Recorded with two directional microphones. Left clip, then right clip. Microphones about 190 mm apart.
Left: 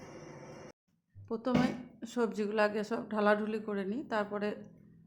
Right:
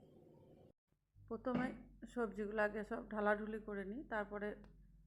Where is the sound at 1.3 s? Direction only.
15° right (ahead or behind).